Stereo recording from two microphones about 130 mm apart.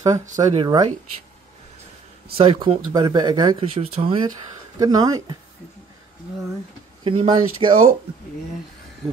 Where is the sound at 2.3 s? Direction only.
40° right (ahead or behind).